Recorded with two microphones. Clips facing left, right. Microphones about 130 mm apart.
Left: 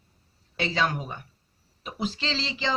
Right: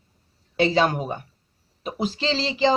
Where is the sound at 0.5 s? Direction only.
40° right (ahead or behind).